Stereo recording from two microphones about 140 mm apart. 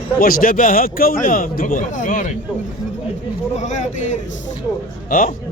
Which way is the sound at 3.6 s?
55° left (ahead or behind).